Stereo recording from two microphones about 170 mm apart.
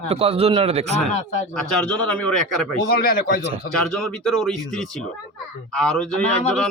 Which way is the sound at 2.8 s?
60° left (ahead or behind).